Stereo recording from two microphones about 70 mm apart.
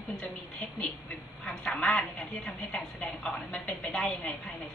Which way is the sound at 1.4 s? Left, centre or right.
Centre.